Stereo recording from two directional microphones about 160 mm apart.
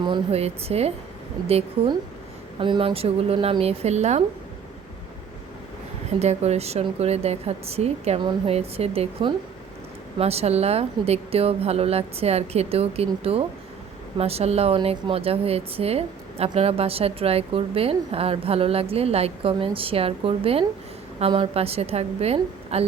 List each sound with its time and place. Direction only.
0.0 s a woman's voice: 35° right (ahead or behind)
2.6 s a woman's voice: 30° right (ahead or behind)
6.1 s a woman's voice: 40° right (ahead or behind)